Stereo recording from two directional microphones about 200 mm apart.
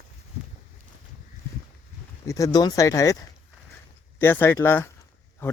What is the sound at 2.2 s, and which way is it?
Speech, 15° left (ahead or behind).